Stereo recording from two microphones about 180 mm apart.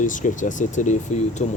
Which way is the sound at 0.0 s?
45° left (ahead or behind).